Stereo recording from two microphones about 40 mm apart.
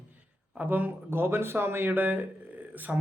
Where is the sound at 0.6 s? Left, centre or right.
Right.